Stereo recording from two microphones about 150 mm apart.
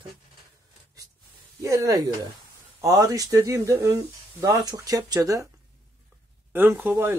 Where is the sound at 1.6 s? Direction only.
20° right (ahead or behind).